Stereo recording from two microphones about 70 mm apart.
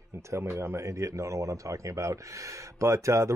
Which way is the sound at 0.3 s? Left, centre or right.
Right.